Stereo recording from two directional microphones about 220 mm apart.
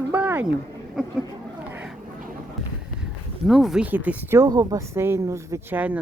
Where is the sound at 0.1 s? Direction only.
10° right (ahead or behind).